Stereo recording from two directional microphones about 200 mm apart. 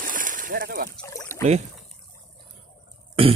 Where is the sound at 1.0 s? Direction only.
15° left (ahead or behind).